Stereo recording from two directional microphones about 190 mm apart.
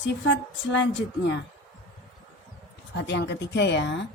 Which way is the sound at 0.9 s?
70° left (ahead or behind).